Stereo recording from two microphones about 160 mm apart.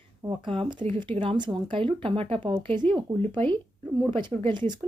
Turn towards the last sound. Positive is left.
turn(degrees=-30)  # may be behind; listen again after turning